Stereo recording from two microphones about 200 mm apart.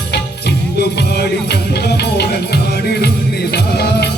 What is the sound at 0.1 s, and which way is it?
Music, 55° left (ahead or behind).